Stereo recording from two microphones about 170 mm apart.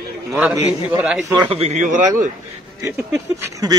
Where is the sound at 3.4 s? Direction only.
20° right (ahead or behind).